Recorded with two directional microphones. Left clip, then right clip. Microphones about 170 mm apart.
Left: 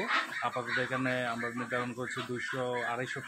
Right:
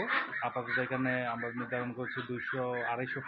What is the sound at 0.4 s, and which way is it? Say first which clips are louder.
Speech: left 1 dB; 15° left (ahead or behind).